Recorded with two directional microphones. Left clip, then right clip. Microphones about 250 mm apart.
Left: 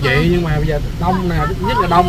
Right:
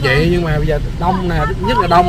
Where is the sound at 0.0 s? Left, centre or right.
Centre.